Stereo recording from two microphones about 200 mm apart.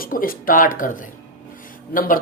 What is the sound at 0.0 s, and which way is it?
Speech, 45° left (ahead or behind).